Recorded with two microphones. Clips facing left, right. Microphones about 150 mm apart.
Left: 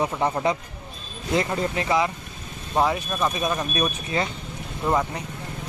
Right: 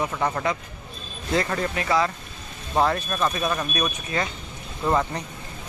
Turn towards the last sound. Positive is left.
turn(degrees=5)  # may be behind; listen again after turning